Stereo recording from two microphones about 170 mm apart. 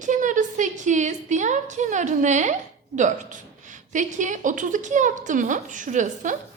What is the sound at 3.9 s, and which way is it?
A woman's voice, 45° right (ahead or behind).